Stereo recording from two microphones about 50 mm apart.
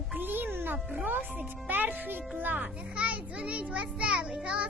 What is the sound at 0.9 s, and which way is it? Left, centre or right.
A child's voice, right.